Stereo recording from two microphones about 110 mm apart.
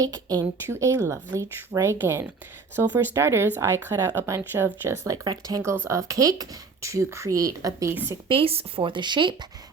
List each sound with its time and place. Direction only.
0.0 s speech: 35° right (ahead or behind)
8.3 s a woman's voice: 60° right (ahead or behind)